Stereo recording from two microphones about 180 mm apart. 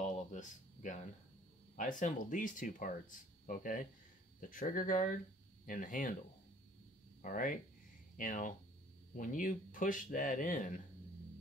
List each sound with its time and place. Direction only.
0.0 s a sound: 45° left (ahead or behind)
1.8 s speech: 45° left (ahead or behind)
7.2 s speech: 50° left (ahead or behind)